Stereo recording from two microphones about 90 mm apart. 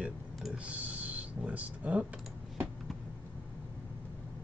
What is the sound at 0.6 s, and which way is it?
Speech, 15° right (ahead or behind).